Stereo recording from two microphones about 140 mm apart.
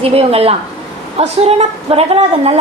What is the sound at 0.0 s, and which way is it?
A woman's voice, 45° right (ahead or behind).